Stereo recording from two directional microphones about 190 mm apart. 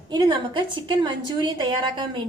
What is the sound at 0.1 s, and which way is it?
A woman's voice, 25° right (ahead or behind).